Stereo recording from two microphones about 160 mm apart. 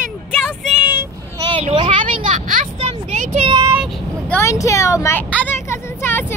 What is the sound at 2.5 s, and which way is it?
Vehicle, 50° right (ahead or behind).